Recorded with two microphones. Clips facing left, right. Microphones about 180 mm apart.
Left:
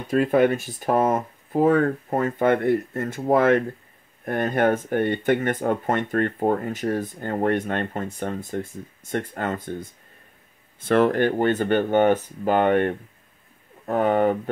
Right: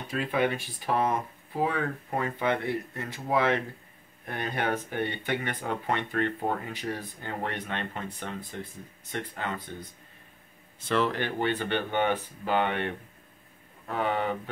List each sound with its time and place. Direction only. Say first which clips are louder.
0.1 s speech: left 9 dB; 45° left (ahead or behind)